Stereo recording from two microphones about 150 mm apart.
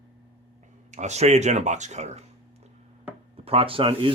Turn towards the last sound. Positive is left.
turn(degrees=-35)  # may be behind; listen again after turning